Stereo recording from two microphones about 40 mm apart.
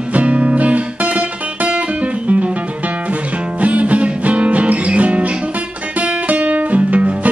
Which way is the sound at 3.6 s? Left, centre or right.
Right.